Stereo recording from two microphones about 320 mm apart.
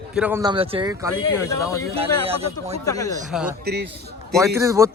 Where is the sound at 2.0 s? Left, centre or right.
Centre.